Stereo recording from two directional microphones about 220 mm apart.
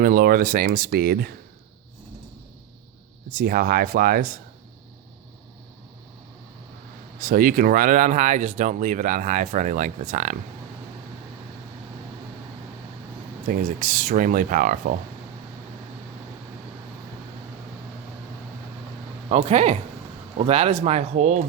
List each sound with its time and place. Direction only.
0.0 s speech: 40° right (ahead or behind)
3.2 s speech: 40° right (ahead or behind)
7.2 s speech: 40° right (ahead or behind)
13.5 s speech: 35° right (ahead or behind)
19.5 s speech: 30° right (ahead or behind)